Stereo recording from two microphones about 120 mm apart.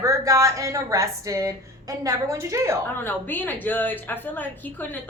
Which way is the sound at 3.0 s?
15° left (ahead or behind).